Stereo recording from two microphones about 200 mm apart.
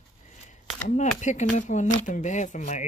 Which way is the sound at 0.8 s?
35° left (ahead or behind).